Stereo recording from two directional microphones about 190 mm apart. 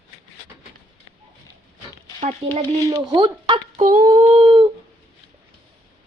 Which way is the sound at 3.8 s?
45° right (ahead or behind).